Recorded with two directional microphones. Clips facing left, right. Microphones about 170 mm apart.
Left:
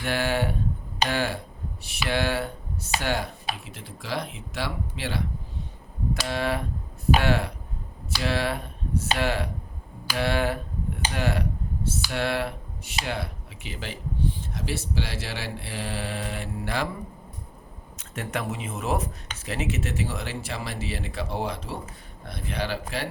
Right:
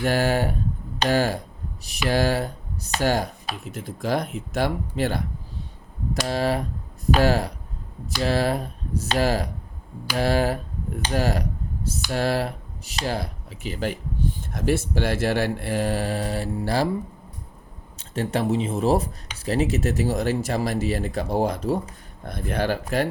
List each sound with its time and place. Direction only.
0.0 s speech: 40° right (ahead or behind)
6.2 s speech: 35° right (ahead or behind)
17.9 s speech: 30° right (ahead or behind); by 23.0 s 45° right (ahead or behind)